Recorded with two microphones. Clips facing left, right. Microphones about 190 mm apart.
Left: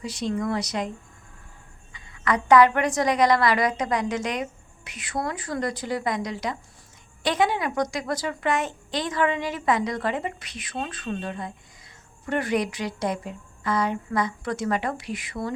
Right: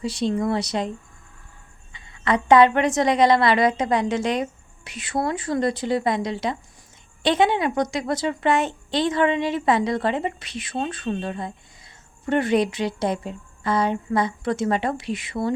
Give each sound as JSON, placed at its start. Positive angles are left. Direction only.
{"t": 0.0, "sound": "a woman's voice", "side_deg": -30}
{"t": 1.9, "sound": "a woman's voice", "side_deg": -25}